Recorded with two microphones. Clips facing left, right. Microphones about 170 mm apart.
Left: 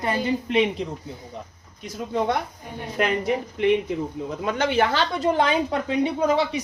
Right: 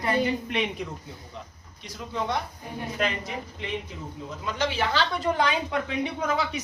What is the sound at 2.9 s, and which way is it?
Speech, 65° left (ahead or behind).